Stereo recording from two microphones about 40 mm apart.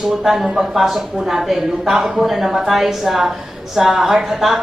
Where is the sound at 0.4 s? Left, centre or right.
Centre.